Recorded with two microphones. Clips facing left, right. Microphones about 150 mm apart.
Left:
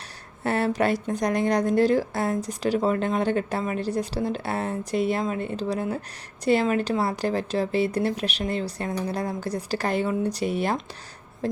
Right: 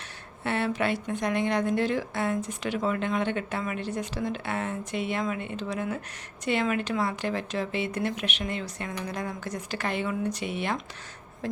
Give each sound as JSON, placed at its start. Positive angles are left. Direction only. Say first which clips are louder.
{"t": 0.4, "sound": "a woman's voice", "louder": "left 4 dB", "side_deg": 40}